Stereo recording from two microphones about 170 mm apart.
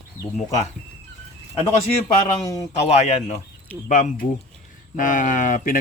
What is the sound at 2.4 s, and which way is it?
Speech, 20° left (ahead or behind).